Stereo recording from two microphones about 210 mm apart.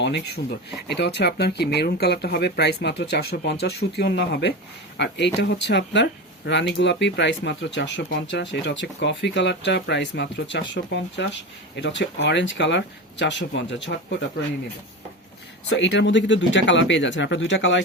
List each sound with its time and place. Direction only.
0.9 s speech: 55° left (ahead or behind)
15.7 s speech: 60° left (ahead or behind)